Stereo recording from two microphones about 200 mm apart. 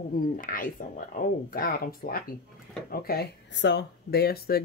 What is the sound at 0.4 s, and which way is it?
Speech, 45° left (ahead or behind).